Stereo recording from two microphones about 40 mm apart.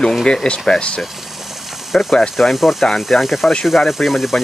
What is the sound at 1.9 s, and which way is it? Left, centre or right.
Speech, centre.